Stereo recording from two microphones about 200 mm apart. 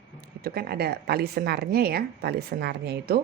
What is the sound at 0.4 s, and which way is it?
A woman's voice, 50° right (ahead or behind).